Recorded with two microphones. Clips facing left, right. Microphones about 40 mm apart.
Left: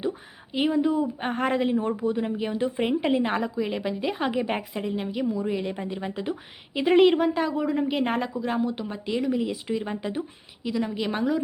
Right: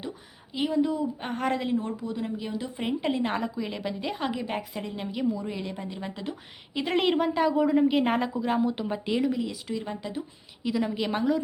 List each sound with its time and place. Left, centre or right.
0.0 s speech: left
4.7 s a woman's voice: centre
9.3 s speech: centre
10.6 s a woman's voice: centre